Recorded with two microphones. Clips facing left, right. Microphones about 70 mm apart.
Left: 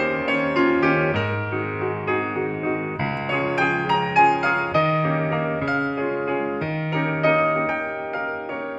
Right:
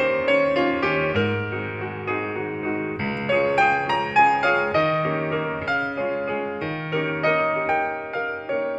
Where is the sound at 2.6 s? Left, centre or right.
Left.